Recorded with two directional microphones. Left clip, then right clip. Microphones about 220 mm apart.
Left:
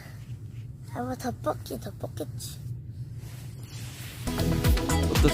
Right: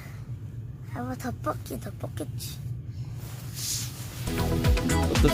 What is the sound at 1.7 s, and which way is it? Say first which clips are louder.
Speech: left 1 dB; 5° left (ahead or behind).